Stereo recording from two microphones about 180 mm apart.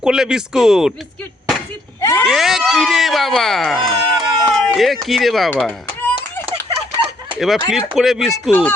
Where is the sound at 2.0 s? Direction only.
15° left (ahead or behind).